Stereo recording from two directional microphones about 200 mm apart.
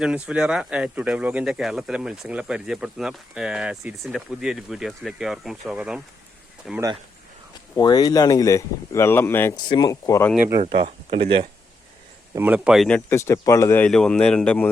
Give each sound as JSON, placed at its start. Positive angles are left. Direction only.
{"t": 0.0, "sound": "speech", "side_deg": -5}
{"t": 7.8, "sound": "speech", "side_deg": 20}
{"t": 10.3, "sound": "speech", "side_deg": -10}
{"t": 10.6, "sound": "speech", "side_deg": -30}
{"t": 12.3, "sound": "speech", "side_deg": -10}
{"t": 13.1, "sound": "speech", "side_deg": 15}